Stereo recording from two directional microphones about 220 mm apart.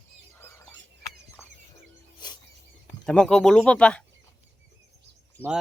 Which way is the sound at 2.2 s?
20° left (ahead or behind).